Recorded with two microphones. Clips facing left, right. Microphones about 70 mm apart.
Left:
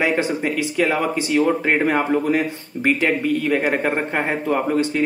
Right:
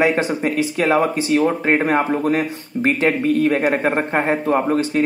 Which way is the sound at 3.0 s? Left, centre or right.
Right.